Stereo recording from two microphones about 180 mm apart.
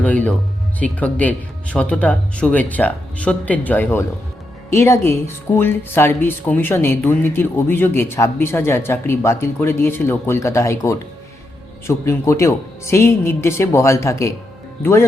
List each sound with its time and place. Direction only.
0.0 s speech: 10° left (ahead or behind)